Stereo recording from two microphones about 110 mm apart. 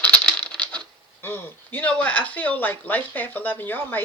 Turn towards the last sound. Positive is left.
turn(degrees=20)  # may be behind; listen again after turning